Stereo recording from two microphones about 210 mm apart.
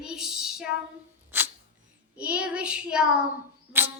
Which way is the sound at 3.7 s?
10° right (ahead or behind).